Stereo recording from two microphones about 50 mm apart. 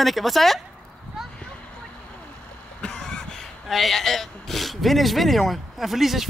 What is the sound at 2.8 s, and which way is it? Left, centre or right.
Cough, centre.